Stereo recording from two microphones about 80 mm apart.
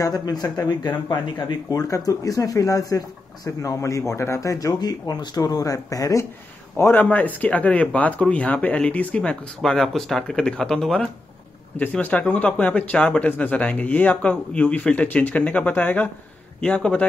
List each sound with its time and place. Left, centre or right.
0.0 s speech: left
4.7 s speech: left
6.8 s speech: left